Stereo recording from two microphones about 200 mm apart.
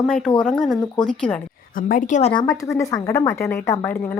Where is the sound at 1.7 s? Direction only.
40° left (ahead or behind).